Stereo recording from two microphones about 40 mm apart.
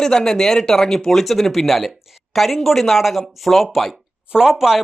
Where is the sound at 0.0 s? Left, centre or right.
Centre.